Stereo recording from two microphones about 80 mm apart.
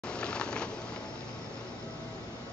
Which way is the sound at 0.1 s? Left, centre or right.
Centre.